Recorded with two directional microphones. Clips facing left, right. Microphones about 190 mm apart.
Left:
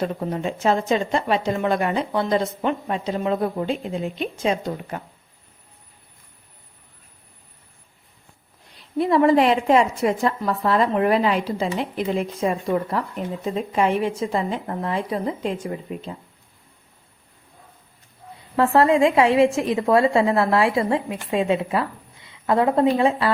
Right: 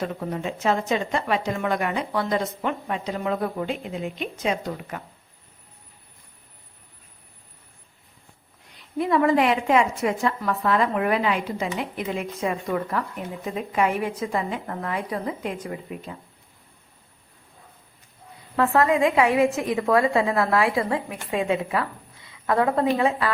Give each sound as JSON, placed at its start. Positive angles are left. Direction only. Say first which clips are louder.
{"t": 0.0, "sound": "a woman's voice", "louder": "left 3 dB", "side_deg": 35}
{"t": 8.7, "sound": "a woman's voice", "louder": "left 3 dB", "side_deg": 30}
{"t": 18.5, "sound": "a woman's voice", "louder": "left 3 dB", "side_deg": 30}